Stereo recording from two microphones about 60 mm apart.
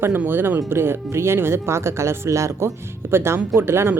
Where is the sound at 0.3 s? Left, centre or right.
Right.